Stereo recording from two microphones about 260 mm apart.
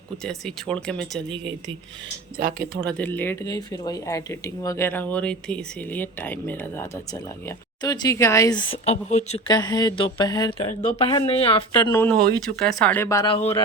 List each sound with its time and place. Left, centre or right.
0.3 s speech: centre
2.8 s speech: centre; by 9.4 s left
9.5 s speech: centre
11.8 s speech: centre